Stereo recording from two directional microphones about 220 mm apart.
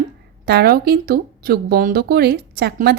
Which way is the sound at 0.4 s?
45° right (ahead or behind).